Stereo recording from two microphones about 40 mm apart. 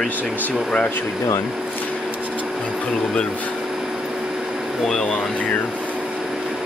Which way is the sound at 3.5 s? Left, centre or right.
Centre.